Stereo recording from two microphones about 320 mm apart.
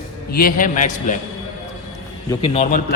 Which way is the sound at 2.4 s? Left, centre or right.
Centre.